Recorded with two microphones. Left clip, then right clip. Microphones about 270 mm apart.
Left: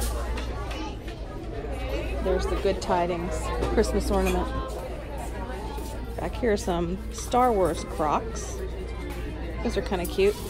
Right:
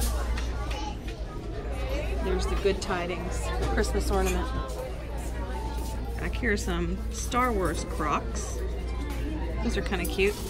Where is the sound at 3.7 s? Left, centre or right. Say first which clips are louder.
Left 4 dB; left.